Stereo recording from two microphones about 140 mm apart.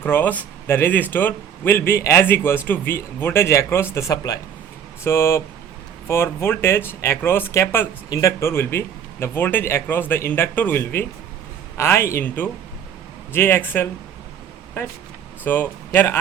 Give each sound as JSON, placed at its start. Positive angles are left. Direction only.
{"t": 0.0, "sound": "speech", "side_deg": 15}
{"t": 15.4, "sound": "speech", "side_deg": 15}